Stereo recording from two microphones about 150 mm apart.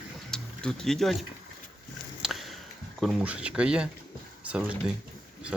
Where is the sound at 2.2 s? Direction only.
Centre (ahead or behind).